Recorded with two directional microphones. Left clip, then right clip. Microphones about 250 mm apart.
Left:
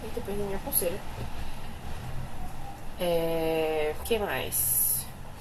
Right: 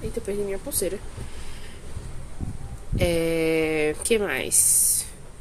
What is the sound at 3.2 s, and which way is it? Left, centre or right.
Speech, right.